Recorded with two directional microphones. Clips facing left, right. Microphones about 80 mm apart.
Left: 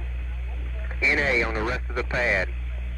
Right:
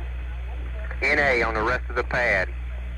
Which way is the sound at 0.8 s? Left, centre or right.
Right.